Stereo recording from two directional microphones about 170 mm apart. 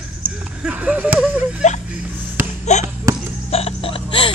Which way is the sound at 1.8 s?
10° right (ahead or behind).